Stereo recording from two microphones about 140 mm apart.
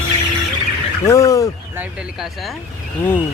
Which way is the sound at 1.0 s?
25° left (ahead or behind).